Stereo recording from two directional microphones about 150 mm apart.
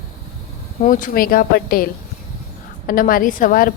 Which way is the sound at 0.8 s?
65° left (ahead or behind).